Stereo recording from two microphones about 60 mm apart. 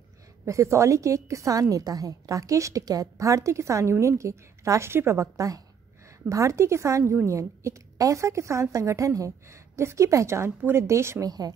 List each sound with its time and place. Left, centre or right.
0.5 s a woman's voice: right
9.8 s a woman's voice: right
11.2 s speech: right